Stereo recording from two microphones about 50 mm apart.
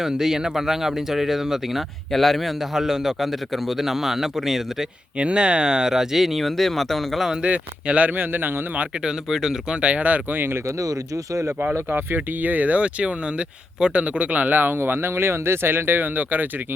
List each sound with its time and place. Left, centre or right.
0.0 s a man's voice: centre
5.1 s a man's voice: right; by 7.3 s centre
7.4 s speech: right
9.0 s a man's voice: centre
9.8 s speech: right
11.6 s speech: right
16.1 s speech: right